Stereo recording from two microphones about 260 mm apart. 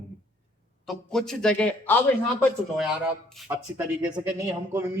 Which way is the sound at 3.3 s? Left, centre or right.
Centre.